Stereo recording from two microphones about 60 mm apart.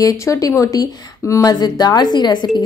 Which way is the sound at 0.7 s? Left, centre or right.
Left.